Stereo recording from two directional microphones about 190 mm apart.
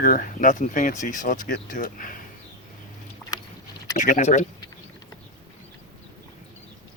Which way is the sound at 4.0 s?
40° left (ahead or behind).